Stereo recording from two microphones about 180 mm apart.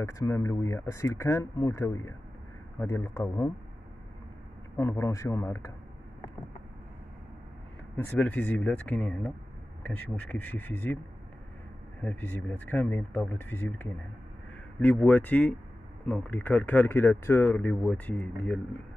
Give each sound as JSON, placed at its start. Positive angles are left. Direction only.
{"t": 0.0, "sound": "speech", "side_deg": 15}
{"t": 4.7, "sound": "speech", "side_deg": 15}
{"t": 8.0, "sound": "speech", "side_deg": 10}
{"t": 12.0, "sound": "speech", "side_deg": 10}